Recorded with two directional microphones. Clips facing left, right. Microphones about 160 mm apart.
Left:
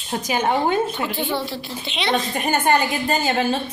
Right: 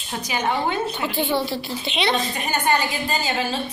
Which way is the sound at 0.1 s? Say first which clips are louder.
Left 3 dB; 45° left (ahead or behind).